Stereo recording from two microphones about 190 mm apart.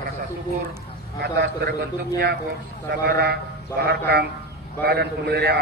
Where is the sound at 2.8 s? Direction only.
55° right (ahead or behind).